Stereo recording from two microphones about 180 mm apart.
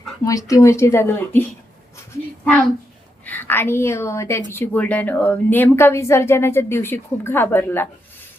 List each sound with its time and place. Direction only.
0.3 s a woman's voice: 20° left (ahead or behind)
3.2 s a woman's voice: 10° left (ahead or behind)